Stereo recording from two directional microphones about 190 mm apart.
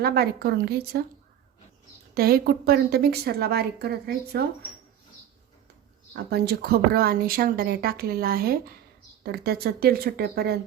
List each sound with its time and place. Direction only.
0.0 s a woman's voice: 55° right (ahead or behind)
2.1 s a woman's voice: 55° right (ahead or behind)
6.1 s a woman's voice: 55° right (ahead or behind)